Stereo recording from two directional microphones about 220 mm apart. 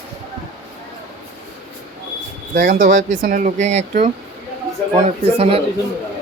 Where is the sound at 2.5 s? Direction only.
35° right (ahead or behind).